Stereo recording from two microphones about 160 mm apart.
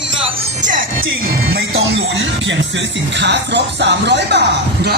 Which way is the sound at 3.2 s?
90° right.